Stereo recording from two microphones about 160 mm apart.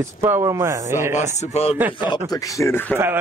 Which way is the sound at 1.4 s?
40° left (ahead or behind).